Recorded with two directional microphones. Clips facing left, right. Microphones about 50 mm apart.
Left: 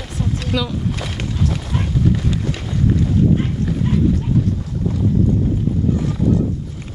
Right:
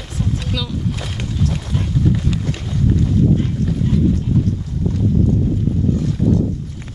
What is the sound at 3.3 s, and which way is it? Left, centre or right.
Dog, left.